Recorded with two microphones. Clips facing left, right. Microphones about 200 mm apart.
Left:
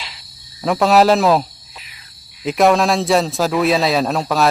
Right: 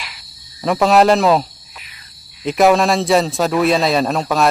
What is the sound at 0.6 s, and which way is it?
A man's voice, centre (ahead or behind).